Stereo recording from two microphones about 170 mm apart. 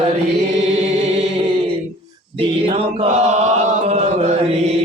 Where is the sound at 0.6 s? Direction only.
40° right (ahead or behind).